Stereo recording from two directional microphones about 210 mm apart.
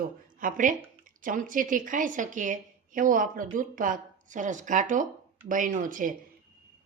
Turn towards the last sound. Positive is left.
turn(degrees=-40)  # may be behind; listen again after turning